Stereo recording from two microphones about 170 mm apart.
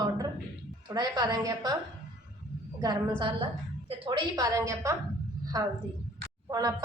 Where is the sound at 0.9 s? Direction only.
25° right (ahead or behind).